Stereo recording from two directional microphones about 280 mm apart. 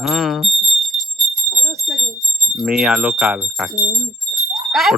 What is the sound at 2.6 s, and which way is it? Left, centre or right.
Speech, centre.